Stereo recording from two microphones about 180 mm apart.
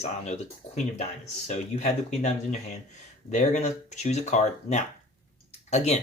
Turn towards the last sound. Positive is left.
turn(degrees=35)  # may be behind; listen again after turning